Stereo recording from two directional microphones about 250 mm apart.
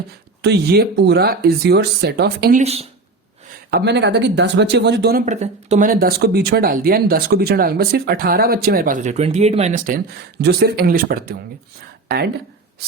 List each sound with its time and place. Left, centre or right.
0.4 s speech: right
3.7 s speech: right